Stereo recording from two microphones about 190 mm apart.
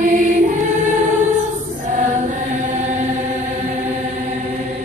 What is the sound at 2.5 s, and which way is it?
Chant, 40° right (ahead or behind).